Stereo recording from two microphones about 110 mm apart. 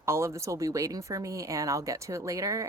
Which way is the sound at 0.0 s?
25° right (ahead or behind).